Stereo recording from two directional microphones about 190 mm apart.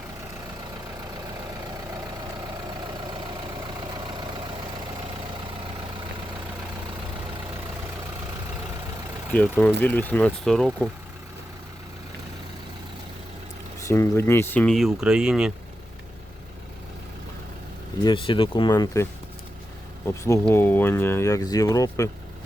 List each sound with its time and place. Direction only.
9.3 s speech: 10° left (ahead or behind)
13.8 s speech: 15° left (ahead or behind); by 15.5 s 5° right (ahead or behind)
18.0 s speech: 25° left (ahead or behind)
20.4 s speech: 10° left (ahead or behind)